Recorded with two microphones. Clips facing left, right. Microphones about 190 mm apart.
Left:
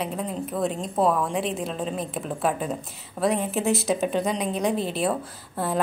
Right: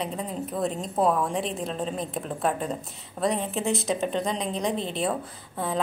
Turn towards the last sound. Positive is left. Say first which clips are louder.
# left 2 dB
turn(degrees=5)  # may be behind; listen again after turning